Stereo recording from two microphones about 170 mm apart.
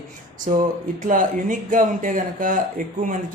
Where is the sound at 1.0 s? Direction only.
50° right (ahead or behind).